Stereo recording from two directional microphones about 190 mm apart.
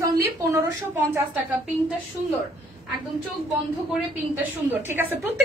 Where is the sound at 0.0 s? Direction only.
15° right (ahead or behind).